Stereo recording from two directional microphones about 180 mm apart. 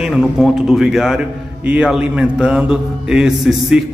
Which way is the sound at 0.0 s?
Centre (ahead or behind).